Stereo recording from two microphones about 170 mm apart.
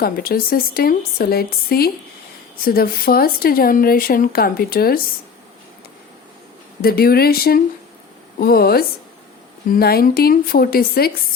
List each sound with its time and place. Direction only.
0.0 s speech: 60° left (ahead or behind)
6.8 s speech: 65° left (ahead or behind)